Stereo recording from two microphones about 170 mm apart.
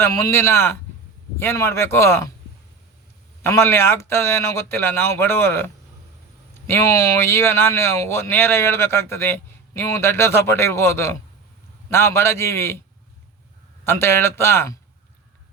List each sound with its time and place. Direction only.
0.0 s speech: 15° left (ahead or behind)
3.4 s speech: 15° left (ahead or behind)
13.8 s speech: 15° left (ahead or behind)